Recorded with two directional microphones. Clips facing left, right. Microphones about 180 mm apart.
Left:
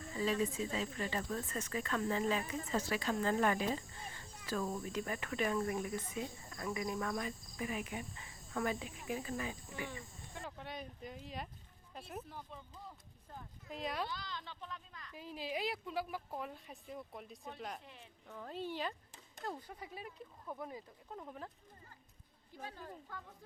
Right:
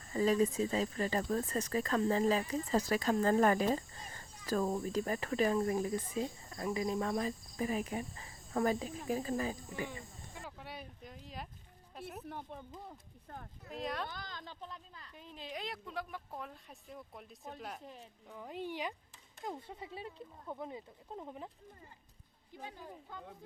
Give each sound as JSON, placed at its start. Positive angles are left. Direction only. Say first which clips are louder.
{"t": 0.1, "sound": "speech", "louder": "right 6 dB", "side_deg": -40}
{"t": 10.4, "sound": "a sound", "louder": "left 2 dB", "side_deg": -5}
{"t": 11.9, "sound": "a woman's voice", "louder": "right 1 dB", "side_deg": -5}
{"t": 12.2, "sound": "speech", "louder": "right 5 dB", "side_deg": -60}
{"t": 13.7, "sound": "a woman's voice", "louder": "right 1 dB", "side_deg": 0}
{"t": 14.1, "sound": "speech", "louder": "left 1 dB", "side_deg": -45}
{"t": 15.1, "sound": "a woman's voice", "louder": "left 4 dB", "side_deg": 5}
{"t": 17.8, "sound": "speech", "louder": "right 6 dB", "side_deg": -40}
{"t": 18.3, "sound": "a woman's voice", "louder": "right 1 dB", "side_deg": -15}
{"t": 19.5, "sound": "speech", "louder": "right 2 dB", "side_deg": -25}
{"t": 22.5, "sound": "a woman's voice", "louder": "even", "side_deg": -15}